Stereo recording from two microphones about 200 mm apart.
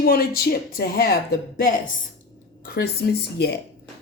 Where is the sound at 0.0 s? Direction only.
50° left (ahead or behind).